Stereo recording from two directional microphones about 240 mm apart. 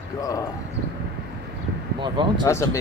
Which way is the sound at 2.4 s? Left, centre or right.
Centre.